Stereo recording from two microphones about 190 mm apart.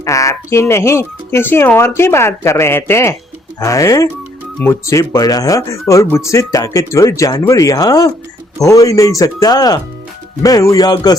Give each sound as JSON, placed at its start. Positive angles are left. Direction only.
{"t": 0.0, "sound": "speech", "side_deg": 15}